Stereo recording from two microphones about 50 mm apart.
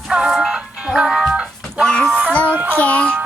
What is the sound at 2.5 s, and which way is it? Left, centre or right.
Child singing, right.